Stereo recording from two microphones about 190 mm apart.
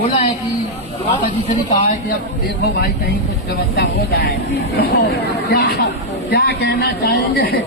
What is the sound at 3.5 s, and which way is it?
Speech, 55° left (ahead or behind).